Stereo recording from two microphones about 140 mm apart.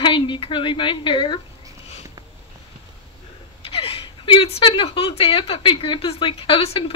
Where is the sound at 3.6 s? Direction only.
40° left (ahead or behind).